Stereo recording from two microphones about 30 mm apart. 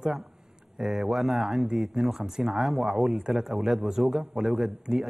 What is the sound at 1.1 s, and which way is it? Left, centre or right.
A man's voice, centre.